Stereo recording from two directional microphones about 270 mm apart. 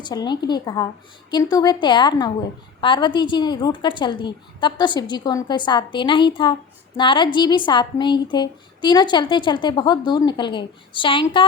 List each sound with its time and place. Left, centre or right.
0.0 s a woman's voice: centre